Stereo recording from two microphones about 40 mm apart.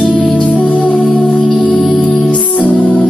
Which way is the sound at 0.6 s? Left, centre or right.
Left.